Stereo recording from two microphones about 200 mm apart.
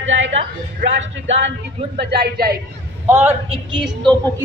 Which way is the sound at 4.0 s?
5° left (ahead or behind).